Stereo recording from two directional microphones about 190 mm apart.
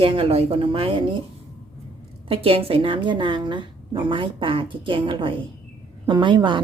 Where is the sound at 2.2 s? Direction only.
30° right (ahead or behind).